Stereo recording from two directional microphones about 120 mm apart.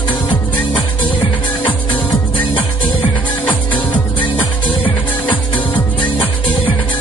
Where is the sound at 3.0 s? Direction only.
45° left (ahead or behind).